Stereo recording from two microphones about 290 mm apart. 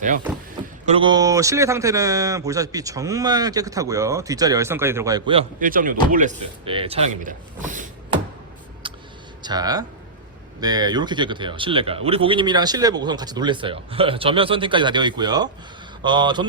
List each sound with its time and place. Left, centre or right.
0.9 s a man's voice: centre
8.8 s vehicle: centre
9.4 s a man's voice: centre